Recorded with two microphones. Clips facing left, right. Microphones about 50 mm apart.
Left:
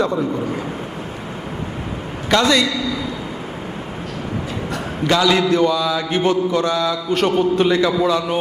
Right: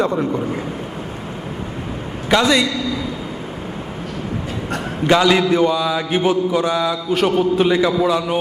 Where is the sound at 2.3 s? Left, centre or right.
Centre.